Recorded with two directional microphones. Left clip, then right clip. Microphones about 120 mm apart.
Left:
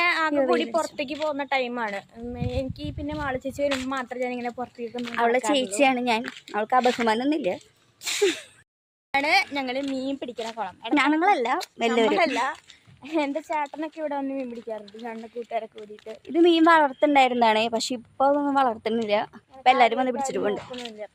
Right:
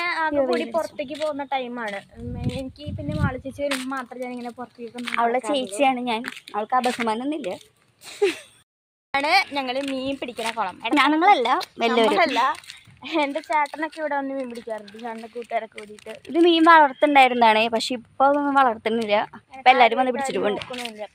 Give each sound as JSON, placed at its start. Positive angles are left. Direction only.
{"t": 0.0, "sound": "a sound", "side_deg": 30}
{"t": 0.8, "sound": "a woman's voice", "side_deg": 25}
{"t": 1.8, "sound": "a woman's voice", "side_deg": 20}
{"t": 2.3, "sound": "speech", "side_deg": 30}
{"t": 5.5, "sound": "a woman's voice", "side_deg": 20}
{"t": 5.9, "sound": "speech", "side_deg": 35}
{"t": 9.1, "sound": "speech", "side_deg": 0}
{"t": 16.8, "sound": "a woman's voice", "side_deg": -10}